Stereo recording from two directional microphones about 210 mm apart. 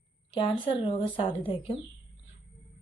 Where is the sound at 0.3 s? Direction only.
25° left (ahead or behind).